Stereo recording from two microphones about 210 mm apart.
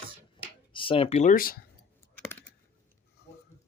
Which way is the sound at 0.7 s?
25° left (ahead or behind).